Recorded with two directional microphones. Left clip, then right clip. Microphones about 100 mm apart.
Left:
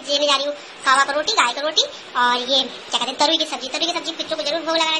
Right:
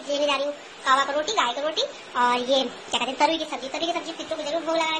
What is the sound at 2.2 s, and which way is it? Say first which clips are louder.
Speech: left 3 dB; 35° right (ahead or behind).